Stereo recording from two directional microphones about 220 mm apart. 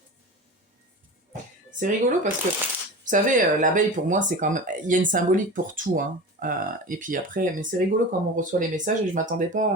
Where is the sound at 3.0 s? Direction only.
35° right (ahead or behind).